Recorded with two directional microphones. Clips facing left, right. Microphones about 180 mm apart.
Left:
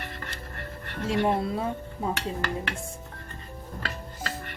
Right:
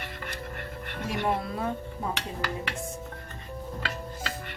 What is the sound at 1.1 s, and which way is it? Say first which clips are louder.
Speech: left 4 dB; 25° left (ahead or behind).